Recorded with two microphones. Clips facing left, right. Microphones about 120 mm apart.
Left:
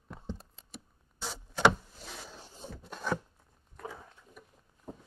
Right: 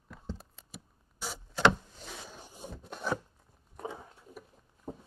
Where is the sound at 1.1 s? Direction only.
10° right (ahead or behind).